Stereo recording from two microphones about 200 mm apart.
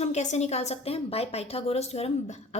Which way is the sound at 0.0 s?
35° left (ahead or behind).